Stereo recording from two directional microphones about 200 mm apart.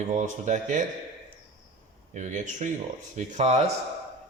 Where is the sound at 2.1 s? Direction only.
35° right (ahead or behind).